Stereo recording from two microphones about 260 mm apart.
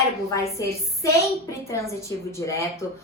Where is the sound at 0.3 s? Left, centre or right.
Centre.